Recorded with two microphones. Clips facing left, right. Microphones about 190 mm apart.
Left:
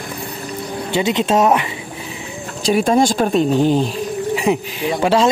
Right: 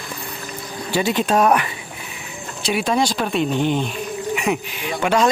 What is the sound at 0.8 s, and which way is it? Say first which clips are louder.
Speech: left 2 dB; 20° left (ahead or behind).